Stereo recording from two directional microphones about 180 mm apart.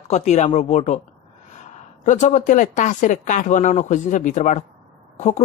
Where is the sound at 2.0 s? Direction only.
45° left (ahead or behind).